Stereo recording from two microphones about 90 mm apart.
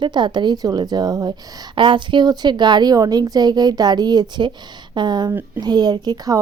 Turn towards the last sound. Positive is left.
turn(degrees=-50)  # may be behind; listen again after turning